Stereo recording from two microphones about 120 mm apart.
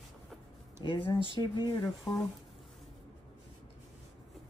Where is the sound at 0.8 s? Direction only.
45° left (ahead or behind).